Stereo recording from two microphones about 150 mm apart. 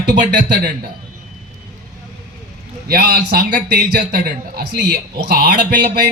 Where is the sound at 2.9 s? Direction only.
90° right.